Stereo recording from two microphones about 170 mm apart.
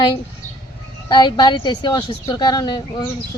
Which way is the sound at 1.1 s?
25° left (ahead or behind).